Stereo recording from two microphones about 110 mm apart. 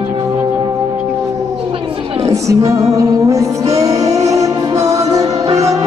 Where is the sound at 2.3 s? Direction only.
30° right (ahead or behind).